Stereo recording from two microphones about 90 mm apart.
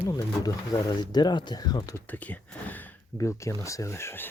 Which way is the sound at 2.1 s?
15° left (ahead or behind).